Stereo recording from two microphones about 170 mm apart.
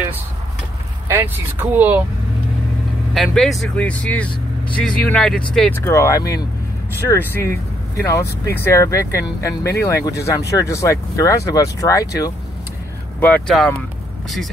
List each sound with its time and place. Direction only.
1.0 s vehicle: 10° right (ahead or behind)
3.2 s speech: centre (ahead or behind)
5.9 s speech: 15° left (ahead or behind)
13.2 s speech: 5° left (ahead or behind)